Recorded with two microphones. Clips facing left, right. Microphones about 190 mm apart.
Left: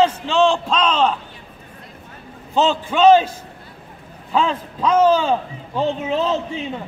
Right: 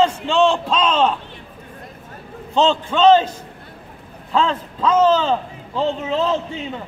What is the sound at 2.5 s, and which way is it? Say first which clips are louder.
A man's voice: right 1 dB; 5° left (ahead or behind).